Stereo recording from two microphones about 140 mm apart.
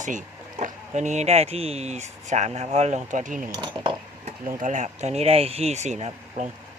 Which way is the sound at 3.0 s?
65° right (ahead or behind).